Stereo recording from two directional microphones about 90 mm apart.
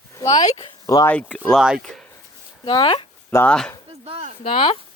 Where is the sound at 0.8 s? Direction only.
35° left (ahead or behind).